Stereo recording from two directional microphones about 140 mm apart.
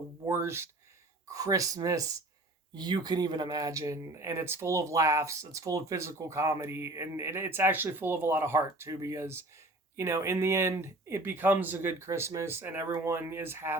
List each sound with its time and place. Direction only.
0.3 s speech: 20° right (ahead or behind)